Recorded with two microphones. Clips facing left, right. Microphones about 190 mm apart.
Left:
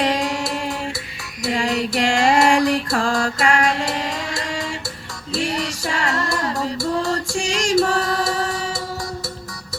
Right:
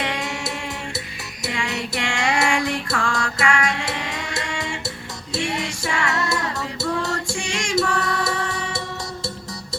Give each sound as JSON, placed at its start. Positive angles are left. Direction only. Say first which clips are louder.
{"t": 0.0, "sound": "music", "louder": "left 6 dB", "side_deg": 40}